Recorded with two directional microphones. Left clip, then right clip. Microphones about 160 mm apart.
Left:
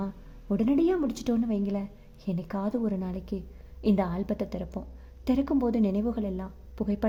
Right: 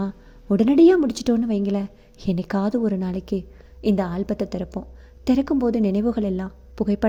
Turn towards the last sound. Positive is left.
turn(degrees=-25)  # may be behind; listen again after turning